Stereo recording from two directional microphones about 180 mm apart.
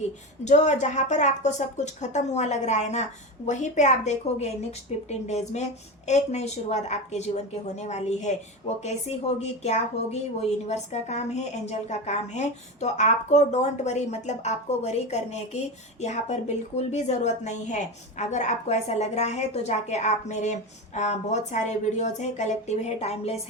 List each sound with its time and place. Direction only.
0.4 s a woman's voice: 40° left (ahead or behind)